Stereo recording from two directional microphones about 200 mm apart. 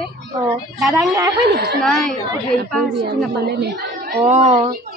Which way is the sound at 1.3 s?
55° right (ahead or behind).